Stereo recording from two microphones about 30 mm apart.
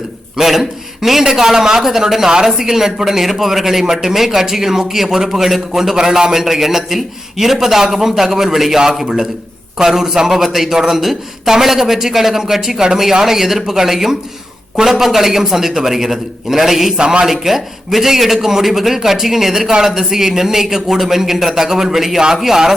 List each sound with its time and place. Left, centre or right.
0.3 s a man's voice: centre